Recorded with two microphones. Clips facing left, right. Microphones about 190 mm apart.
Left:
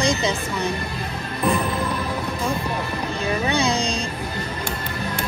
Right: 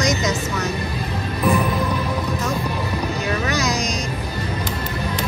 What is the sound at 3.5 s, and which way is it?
Music, 30° left (ahead or behind).